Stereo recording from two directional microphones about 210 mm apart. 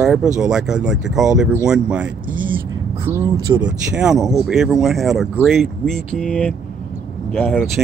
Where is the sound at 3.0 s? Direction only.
15° right (ahead or behind).